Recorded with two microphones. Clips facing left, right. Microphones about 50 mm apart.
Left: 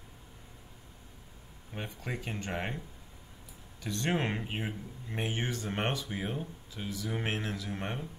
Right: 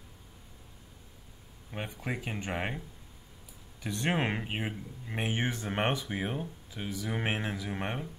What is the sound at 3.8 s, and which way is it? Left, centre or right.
Speech, centre.